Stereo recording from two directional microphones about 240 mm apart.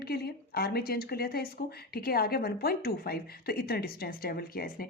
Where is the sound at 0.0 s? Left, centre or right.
Left.